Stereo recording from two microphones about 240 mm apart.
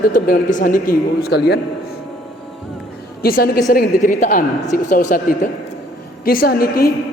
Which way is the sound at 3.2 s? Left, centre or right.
Left.